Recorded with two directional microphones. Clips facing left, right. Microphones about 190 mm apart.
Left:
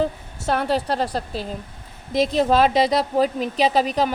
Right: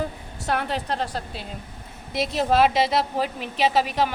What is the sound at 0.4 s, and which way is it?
A woman's voice, 35° left (ahead or behind).